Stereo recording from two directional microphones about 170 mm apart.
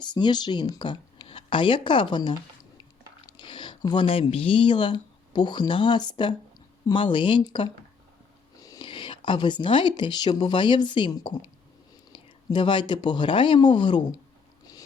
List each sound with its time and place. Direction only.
0.0 s speech: 25° left (ahead or behind)